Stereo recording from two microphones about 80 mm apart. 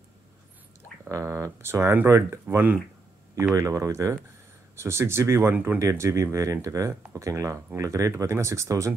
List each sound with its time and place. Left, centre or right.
1.0 s speech: right
2.4 s speech: right
3.5 s speech: right
5.5 s speech: right
5.8 s speech: right